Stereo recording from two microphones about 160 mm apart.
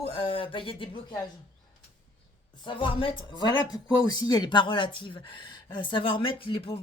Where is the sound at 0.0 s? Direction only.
35° left (ahead or behind).